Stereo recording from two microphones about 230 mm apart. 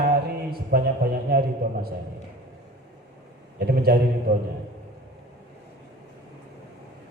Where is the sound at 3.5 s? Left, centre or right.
Right.